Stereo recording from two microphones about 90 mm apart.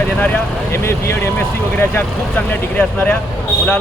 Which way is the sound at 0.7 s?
30° left (ahead or behind).